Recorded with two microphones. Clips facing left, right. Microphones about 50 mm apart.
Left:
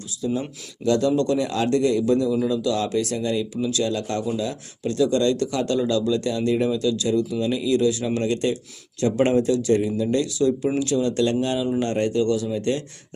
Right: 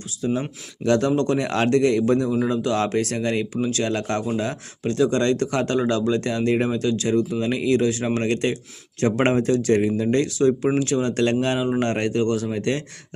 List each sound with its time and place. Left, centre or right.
0.2 s speech: right